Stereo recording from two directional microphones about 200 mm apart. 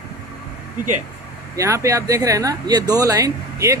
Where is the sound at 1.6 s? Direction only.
15° right (ahead or behind).